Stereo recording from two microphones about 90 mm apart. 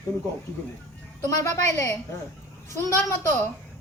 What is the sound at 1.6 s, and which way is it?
A man's voice, 35° left (ahead or behind).